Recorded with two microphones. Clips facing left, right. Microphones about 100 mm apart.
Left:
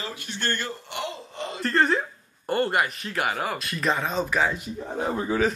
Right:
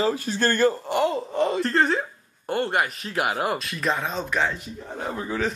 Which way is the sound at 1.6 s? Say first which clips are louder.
Right 1 dB; centre (ahead or behind).